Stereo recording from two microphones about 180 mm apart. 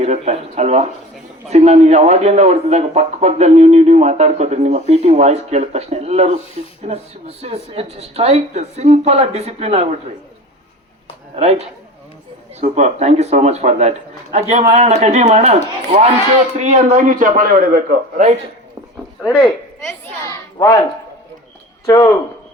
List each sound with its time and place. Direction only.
0.0 s speech: 35° right (ahead or behind)
11.3 s speech: 35° right (ahead or behind)
16.6 s a man's voice: 40° right (ahead or behind)
20.6 s speech: 20° left (ahead or behind)
21.8 s speech: 20° left (ahead or behind)